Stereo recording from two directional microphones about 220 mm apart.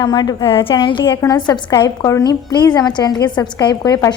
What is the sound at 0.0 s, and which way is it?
A woman's voice, 20° left (ahead or behind).